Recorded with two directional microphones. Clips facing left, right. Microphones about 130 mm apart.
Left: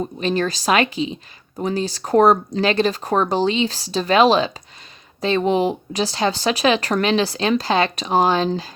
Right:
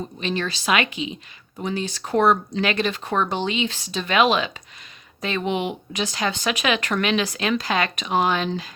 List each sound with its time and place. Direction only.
0.2 s speech: 40° left (ahead or behind)